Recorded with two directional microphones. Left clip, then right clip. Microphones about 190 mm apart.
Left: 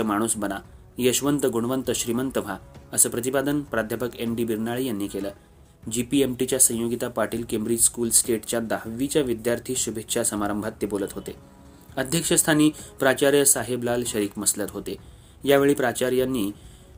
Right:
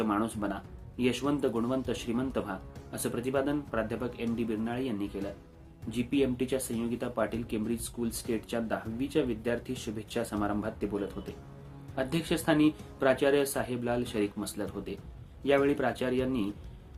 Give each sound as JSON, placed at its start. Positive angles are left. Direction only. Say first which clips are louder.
{"t": 0.0, "sound": "speech", "louder": "left 6 dB", "side_deg": 40}